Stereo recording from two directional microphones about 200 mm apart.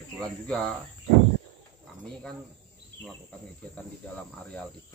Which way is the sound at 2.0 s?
5° left (ahead or behind).